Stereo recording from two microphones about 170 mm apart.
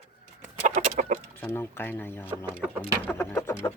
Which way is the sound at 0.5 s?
50° right (ahead or behind).